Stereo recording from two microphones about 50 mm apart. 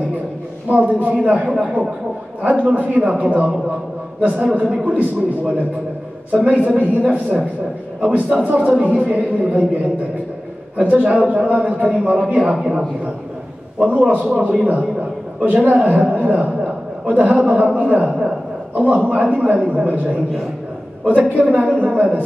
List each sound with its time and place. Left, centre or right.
0.7 s a man's voice: right
10.8 s a man's voice: right
13.7 s a man's voice: right
18.0 s a man's voice: centre
18.8 s a man's voice: right